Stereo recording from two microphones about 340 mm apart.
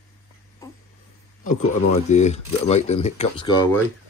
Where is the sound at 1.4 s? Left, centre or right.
Left.